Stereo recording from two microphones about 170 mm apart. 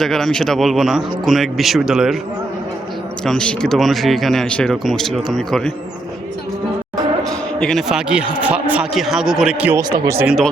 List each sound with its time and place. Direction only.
0.0 s speech: 5° left (ahead or behind)
3.2 s speech: 5° left (ahead or behind)
7.3 s a man's voice: 5° left (ahead or behind); by 10.2 s 20° right (ahead or behind)
10.2 s speech: centre (ahead or behind)